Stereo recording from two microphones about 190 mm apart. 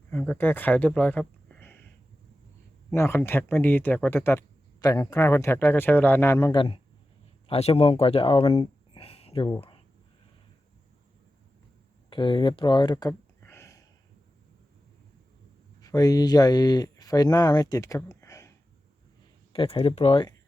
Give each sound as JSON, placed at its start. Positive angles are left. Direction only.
{"t": 0.1, "sound": "speech", "side_deg": 10}
{"t": 2.9, "sound": "speech", "side_deg": 15}
{"t": 6.5, "sound": "speech", "side_deg": 25}
{"t": 12.1, "sound": "a sound", "side_deg": 25}
{"t": 15.8, "sound": "speech", "side_deg": 20}
{"t": 19.5, "sound": "speech", "side_deg": 30}